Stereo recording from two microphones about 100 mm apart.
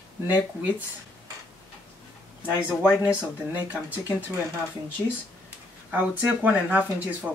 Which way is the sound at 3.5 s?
15° right (ahead or behind).